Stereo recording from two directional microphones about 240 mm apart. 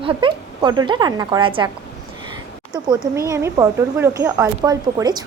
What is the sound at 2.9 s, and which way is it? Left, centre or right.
A woman's voice, centre.